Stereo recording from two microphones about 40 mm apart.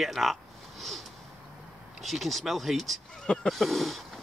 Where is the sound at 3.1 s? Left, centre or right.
Left.